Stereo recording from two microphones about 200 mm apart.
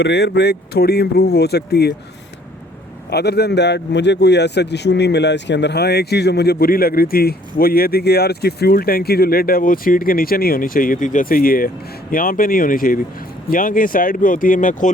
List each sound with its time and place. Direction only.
0.0 s a man's voice: 55° left (ahead or behind)
3.1 s a man's voice: 55° left (ahead or behind)